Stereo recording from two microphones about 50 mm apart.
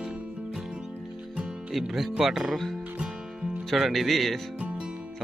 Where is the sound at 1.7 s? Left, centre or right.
Centre.